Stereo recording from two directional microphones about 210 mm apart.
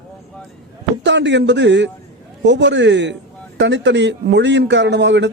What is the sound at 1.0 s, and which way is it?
A man's voice, 55° right (ahead or behind).